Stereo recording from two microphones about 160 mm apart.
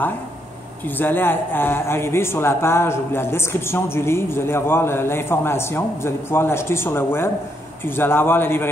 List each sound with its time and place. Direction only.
0.8 s speech: 10° left (ahead or behind)